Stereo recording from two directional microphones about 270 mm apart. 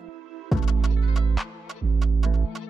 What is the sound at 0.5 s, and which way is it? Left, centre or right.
Music, centre.